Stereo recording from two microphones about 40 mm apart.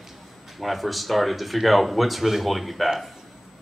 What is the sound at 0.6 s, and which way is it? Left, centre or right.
Speech, centre.